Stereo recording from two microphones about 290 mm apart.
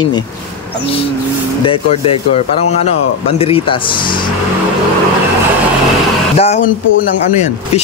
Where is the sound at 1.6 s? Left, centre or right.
Centre.